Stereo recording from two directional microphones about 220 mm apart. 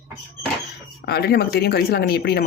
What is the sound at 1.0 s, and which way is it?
A woman's voice, 45° left (ahead or behind).